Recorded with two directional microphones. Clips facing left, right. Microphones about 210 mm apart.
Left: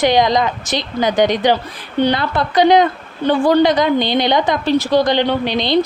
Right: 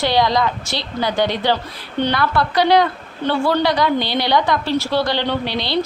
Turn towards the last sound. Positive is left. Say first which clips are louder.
# left 5 dB
turn(degrees=20)  # may be behind; listen again after turning